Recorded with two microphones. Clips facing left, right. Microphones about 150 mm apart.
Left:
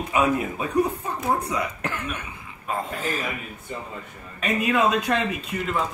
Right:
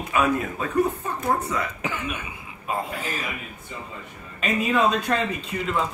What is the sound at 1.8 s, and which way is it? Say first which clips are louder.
Speech: right 1 dB; centre (ahead or behind).